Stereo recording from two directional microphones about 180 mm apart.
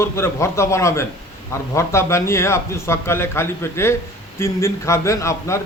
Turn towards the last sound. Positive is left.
turn(degrees=15)  # may be behind; listen again after turning